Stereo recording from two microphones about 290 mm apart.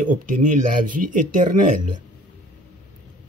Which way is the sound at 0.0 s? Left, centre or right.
Right.